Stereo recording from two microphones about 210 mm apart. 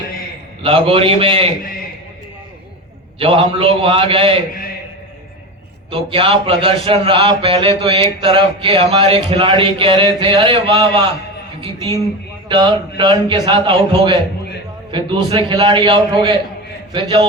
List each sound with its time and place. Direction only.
0.6 s a man's voice: 25° right (ahead or behind)
3.2 s a man's voice: 25° right (ahead or behind)
5.9 s a man's voice: 25° right (ahead or behind)
12.5 s a man's voice: 20° right (ahead or behind)